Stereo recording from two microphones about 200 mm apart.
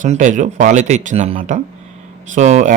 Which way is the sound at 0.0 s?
40° right (ahead or behind).